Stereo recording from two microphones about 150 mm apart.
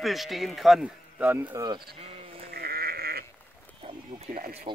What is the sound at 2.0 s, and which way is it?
Sheep, 40° right (ahead or behind).